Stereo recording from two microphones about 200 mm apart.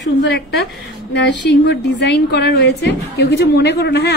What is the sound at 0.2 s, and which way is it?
A woman's voice, 55° left (ahead or behind).